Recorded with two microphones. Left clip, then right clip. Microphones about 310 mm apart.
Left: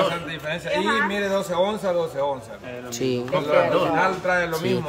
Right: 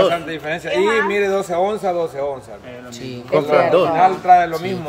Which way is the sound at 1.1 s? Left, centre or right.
Centre.